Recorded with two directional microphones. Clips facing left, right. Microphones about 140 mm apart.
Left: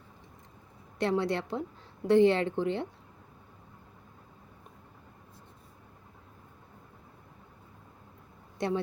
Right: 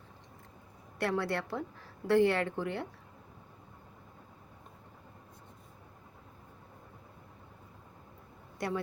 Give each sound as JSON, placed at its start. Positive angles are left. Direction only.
{"t": 0.9, "sound": "speech", "side_deg": 20}
{"t": 8.5, "sound": "speech", "side_deg": 25}